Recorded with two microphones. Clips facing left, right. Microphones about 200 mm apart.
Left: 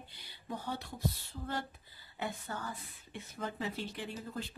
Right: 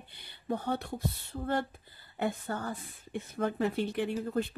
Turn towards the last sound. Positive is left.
turn(degrees=-60)  # may be behind; listen again after turning